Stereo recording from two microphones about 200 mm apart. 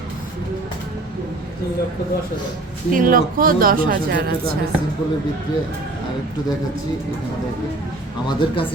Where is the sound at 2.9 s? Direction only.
45° right (ahead or behind).